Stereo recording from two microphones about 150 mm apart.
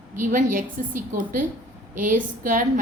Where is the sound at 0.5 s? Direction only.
65° right (ahead or behind).